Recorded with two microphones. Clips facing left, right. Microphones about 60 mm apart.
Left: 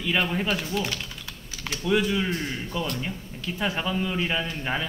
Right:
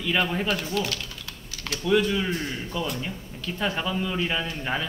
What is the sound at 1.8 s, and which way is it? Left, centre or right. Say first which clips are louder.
Speech: right 1 dB; centre.